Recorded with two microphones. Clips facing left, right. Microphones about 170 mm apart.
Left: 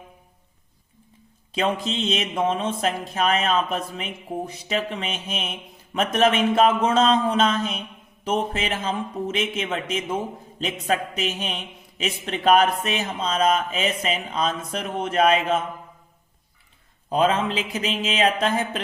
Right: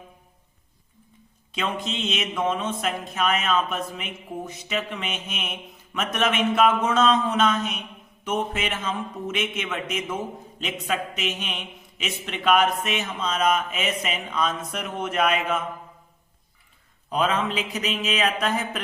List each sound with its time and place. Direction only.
1.5 s speech: 35° left (ahead or behind)
17.1 s a man's voice: 30° left (ahead or behind)